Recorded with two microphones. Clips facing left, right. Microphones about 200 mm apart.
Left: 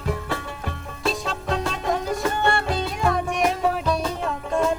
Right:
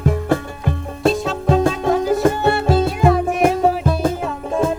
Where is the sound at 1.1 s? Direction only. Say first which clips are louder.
Right 9 dB; centre (ahead or behind).